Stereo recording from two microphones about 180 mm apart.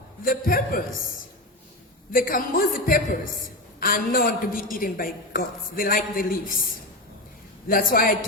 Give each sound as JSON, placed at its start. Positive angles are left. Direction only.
{"t": 0.3, "sound": "a woman's voice", "side_deg": 50}
{"t": 2.1, "sound": "a woman's voice", "side_deg": 55}